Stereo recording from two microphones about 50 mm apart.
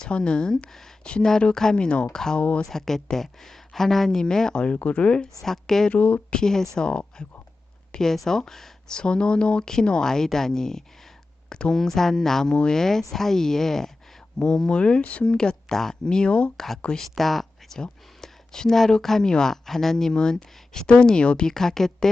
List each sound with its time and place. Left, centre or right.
0.0 s speech: centre
2.6 s speech: centre
5.4 s speech: centre
5.9 s speech: left
6.3 s speech: centre
7.9 s speech: centre
9.0 s speech: centre
16.6 s speech: centre
21.5 s speech: centre